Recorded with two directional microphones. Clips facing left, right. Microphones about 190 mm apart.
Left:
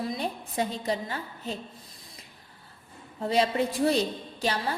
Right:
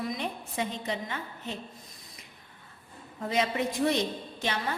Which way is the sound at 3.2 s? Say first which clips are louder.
Left 4 dB; 30° left (ahead or behind).